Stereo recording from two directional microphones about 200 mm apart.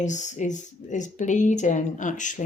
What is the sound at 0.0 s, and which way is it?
Speech, 35° left (ahead or behind).